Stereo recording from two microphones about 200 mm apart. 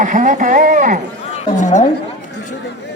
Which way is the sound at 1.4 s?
35° left (ahead or behind).